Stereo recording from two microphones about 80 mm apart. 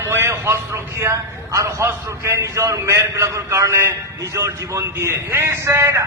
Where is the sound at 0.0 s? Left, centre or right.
Right.